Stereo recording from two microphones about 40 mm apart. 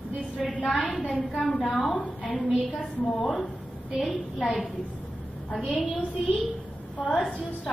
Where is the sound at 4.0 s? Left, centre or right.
Centre.